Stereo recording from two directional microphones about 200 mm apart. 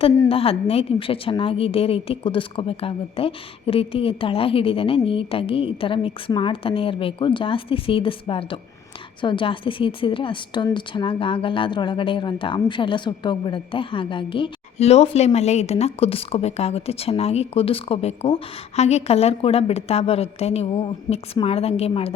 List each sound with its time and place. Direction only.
0.3 s a woman's voice: 30° left (ahead or behind)